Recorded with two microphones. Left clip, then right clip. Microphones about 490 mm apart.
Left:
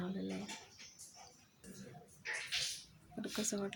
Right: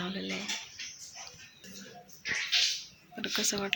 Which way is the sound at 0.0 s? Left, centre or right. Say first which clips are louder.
Right 8 dB; left.